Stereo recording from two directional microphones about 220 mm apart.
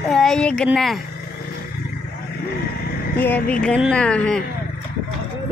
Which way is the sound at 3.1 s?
10° left (ahead or behind).